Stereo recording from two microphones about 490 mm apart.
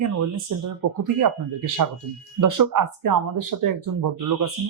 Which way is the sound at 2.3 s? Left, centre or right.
Right.